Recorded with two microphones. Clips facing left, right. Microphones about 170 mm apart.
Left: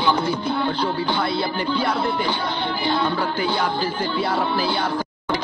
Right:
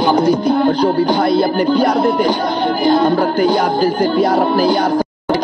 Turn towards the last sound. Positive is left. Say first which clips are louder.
# right 9 dB
turn(degrees=-45)  # may be behind; listen again after turning